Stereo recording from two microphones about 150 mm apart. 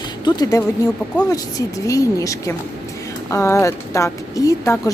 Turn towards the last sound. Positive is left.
turn(degrees=20)  # may be behind; listen again after turning